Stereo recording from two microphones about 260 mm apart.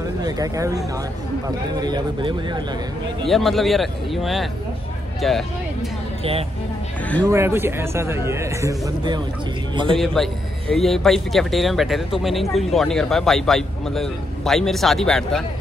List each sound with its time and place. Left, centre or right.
0.2 s a man's voice: centre
3.3 s a man's voice: centre
7.2 s a man's voice: centre
9.9 s a man's voice: centre